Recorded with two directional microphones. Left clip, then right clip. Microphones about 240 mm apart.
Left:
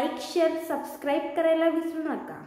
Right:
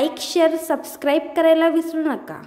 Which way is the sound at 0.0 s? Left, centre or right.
Right.